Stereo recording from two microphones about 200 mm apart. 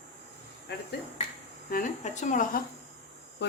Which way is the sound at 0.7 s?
60° left (ahead or behind).